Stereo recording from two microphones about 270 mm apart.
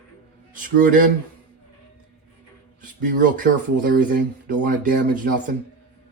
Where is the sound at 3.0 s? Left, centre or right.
Right.